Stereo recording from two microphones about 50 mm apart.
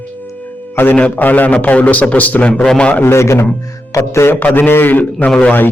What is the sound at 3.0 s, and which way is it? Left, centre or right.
Speech, left.